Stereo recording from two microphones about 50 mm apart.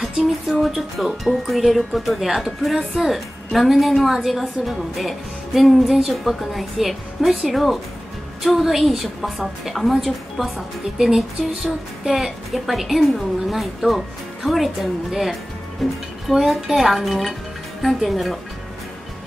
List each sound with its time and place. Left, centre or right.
0.0 s a woman's voice: centre